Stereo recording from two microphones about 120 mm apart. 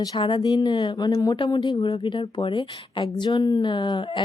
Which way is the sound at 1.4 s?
40° left (ahead or behind).